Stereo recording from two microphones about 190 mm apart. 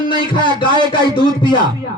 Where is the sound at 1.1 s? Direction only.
25° left (ahead or behind).